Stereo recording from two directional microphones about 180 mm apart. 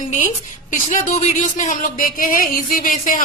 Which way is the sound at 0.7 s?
45° left (ahead or behind).